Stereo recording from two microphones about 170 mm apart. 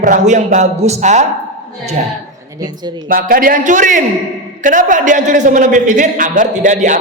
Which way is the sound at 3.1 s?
55° right (ahead or behind).